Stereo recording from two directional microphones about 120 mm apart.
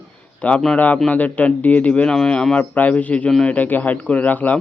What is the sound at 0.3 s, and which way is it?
Speech, 10° left (ahead or behind).